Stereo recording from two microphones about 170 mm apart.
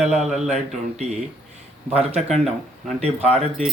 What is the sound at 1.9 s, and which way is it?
Speech, 35° right (ahead or behind).